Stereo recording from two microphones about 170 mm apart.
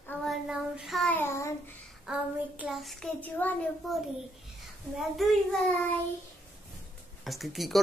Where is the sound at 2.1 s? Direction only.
5° right (ahead or behind).